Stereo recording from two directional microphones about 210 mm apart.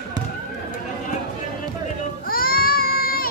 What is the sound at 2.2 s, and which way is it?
Baby cry, 45° left (ahead or behind).